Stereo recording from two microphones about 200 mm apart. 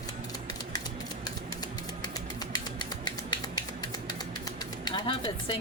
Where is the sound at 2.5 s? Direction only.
20° left (ahead or behind).